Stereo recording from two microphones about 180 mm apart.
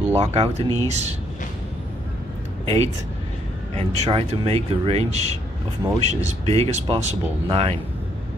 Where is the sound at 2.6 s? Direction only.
35° right (ahead or behind).